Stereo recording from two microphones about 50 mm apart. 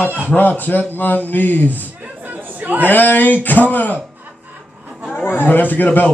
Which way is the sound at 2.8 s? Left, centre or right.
Left.